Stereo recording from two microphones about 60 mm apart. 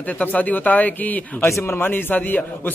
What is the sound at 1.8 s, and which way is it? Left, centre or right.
Speech, left.